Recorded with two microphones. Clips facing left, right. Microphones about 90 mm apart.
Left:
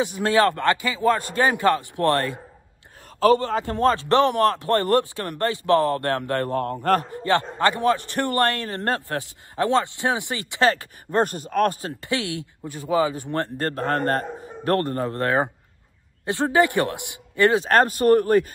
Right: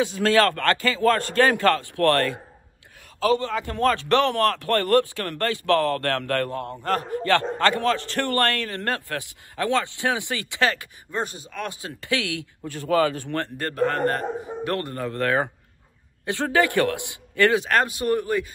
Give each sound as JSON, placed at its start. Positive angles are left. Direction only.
{"t": 0.0, "sound": "speech", "side_deg": 20}
{"t": 3.2, "sound": "a man's voice", "side_deg": 45}
{"t": 3.4, "sound": "a man's voice", "side_deg": 25}
{"t": 6.5, "sound": "speech", "side_deg": 45}
{"t": 7.2, "sound": "a man's voice", "side_deg": 20}
{"t": 11.1, "sound": "speech", "side_deg": 55}
{"t": 12.0, "sound": "a man's voice", "side_deg": 20}
{"t": 13.6, "sound": "a man's voice", "side_deg": 30}
{"t": 15.0, "sound": "a man's voice", "side_deg": 25}
{"t": 17.6, "sound": "speech", "side_deg": 40}